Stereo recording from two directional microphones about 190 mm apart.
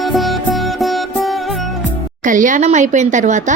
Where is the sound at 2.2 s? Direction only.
45° right (ahead or behind).